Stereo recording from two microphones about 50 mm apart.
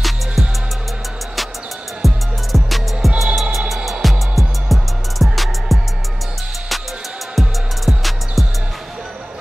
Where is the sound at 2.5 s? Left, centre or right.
Centre.